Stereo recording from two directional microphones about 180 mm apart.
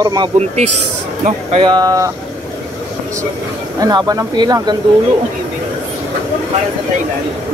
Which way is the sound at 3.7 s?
20° right (ahead or behind).